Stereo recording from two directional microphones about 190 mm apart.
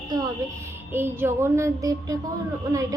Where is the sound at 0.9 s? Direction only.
10° right (ahead or behind).